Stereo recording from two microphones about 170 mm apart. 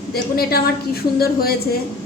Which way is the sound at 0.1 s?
65° left (ahead or behind).